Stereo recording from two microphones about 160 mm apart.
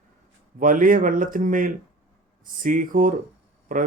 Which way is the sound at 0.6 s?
55° right (ahead or behind).